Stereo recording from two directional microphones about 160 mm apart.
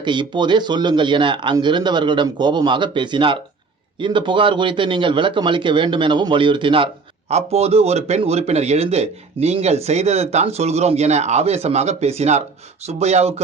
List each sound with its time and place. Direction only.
0.0 s a man's voice: 30° right (ahead or behind)